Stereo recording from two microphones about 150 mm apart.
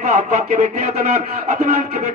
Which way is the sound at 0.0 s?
55° right (ahead or behind).